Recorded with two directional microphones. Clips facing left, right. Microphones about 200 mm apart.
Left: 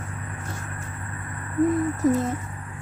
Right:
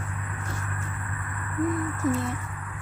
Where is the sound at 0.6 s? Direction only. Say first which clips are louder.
Even; 30° left (ahead or behind).